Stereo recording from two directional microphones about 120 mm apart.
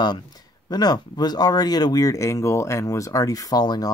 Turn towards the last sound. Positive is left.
turn(degrees=35)  # may be behind; listen again after turning